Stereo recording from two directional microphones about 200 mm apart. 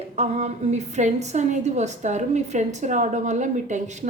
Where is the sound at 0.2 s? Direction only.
35° right (ahead or behind).